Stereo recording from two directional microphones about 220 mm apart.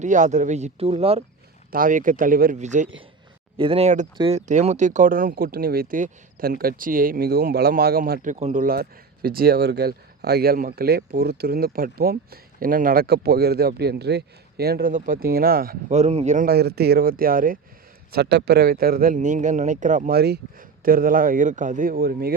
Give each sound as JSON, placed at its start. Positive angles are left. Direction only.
{"t": 0.0, "sound": "speech", "side_deg": -35}
{"t": 1.7, "sound": "speech", "side_deg": -40}